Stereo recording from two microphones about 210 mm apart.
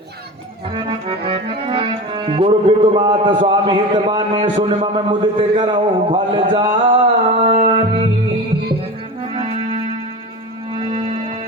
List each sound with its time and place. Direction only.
1.3 s music: 25° right (ahead or behind)
4.5 s a sound: 30° right (ahead or behind)
9.3 s music: 25° right (ahead or behind)